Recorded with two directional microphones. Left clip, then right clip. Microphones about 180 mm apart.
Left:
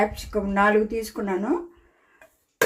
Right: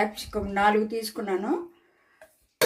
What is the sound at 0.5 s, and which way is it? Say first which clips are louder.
Speech: left 2 dB; 30° left (ahead or behind).